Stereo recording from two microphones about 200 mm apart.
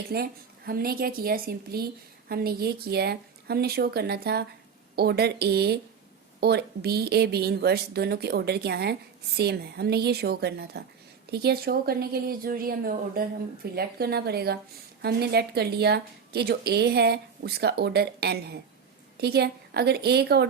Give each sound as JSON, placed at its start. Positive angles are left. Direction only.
{"t": 0.1, "sound": "a woman's voice", "side_deg": -50}